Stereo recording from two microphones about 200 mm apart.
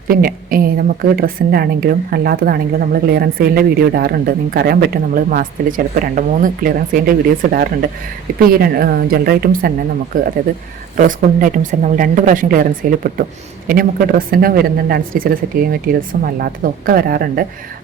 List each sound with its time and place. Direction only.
0.1 s a woman's voice: 45° right (ahead or behind)